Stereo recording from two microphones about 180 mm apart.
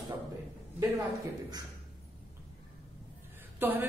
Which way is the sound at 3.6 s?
10° right (ahead or behind).